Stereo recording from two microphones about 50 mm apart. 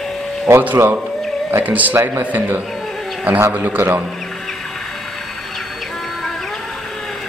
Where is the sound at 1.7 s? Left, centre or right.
Right.